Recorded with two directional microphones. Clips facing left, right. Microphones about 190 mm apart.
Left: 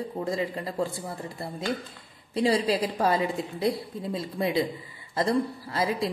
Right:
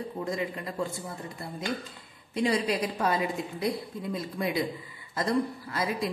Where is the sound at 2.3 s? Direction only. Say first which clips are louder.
Left 3 dB; 30° left (ahead or behind).